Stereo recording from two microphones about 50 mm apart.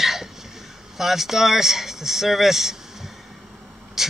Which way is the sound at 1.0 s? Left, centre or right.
Centre.